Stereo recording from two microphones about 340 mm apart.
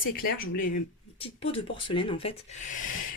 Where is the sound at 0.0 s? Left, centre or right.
Left.